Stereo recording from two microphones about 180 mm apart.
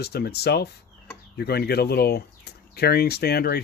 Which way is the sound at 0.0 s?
65° left (ahead or behind).